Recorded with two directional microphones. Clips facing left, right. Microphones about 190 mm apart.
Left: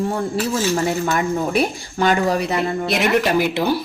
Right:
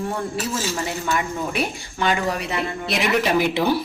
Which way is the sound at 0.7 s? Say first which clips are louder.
Left 5 dB; 45° left (ahead or behind).